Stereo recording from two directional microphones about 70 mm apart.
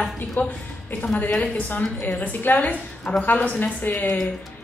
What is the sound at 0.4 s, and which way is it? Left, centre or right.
A woman's voice, left.